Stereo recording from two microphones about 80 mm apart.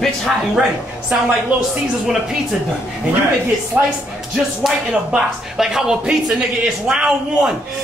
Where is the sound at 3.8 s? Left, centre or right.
Centre.